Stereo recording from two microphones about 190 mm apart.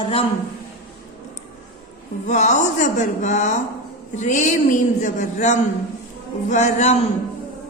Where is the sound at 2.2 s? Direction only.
40° left (ahead or behind).